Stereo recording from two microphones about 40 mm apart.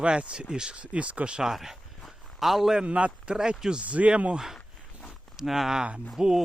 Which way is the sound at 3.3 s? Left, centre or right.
Centre.